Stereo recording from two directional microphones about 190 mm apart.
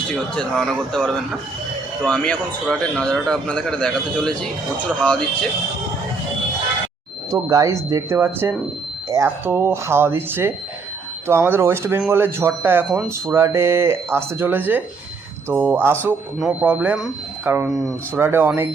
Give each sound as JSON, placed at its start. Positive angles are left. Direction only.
{"t": 0.1, "sound": "a man's voice", "side_deg": 0}
{"t": 7.3, "sound": "speech", "side_deg": -15}